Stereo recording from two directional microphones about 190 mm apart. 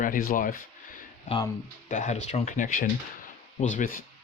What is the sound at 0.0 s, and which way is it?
Speech, 45° left (ahead or behind).